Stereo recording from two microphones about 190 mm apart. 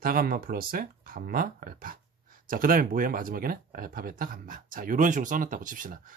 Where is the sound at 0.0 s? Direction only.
50° right (ahead or behind).